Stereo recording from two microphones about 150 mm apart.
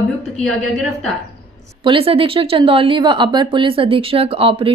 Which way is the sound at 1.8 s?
35° right (ahead or behind).